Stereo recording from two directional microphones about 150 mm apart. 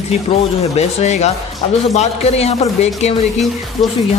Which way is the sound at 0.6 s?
45° left (ahead or behind).